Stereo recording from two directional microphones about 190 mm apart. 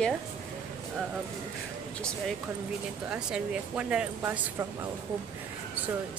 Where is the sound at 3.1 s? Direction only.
5° right (ahead or behind).